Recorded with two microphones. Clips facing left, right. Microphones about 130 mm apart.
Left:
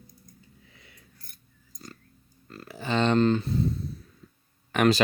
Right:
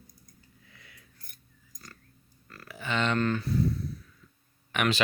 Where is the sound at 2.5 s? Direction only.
30° left (ahead or behind).